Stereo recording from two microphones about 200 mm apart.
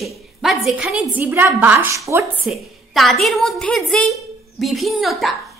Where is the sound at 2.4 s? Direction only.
Centre (ahead or behind).